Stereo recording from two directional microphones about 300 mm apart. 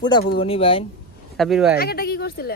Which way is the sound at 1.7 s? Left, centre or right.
Left.